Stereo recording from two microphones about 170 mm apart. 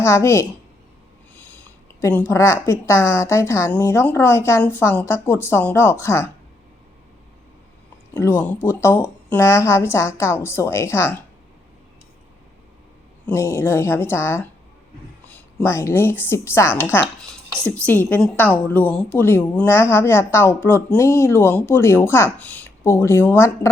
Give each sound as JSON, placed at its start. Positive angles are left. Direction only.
{"t": 0.0, "sound": "a woman's voice", "side_deg": 15}
{"t": 2.0, "sound": "a woman's voice", "side_deg": 15}
{"t": 8.1, "sound": "a woman's voice", "side_deg": 10}
{"t": 13.2, "sound": "a woman's voice", "side_deg": 15}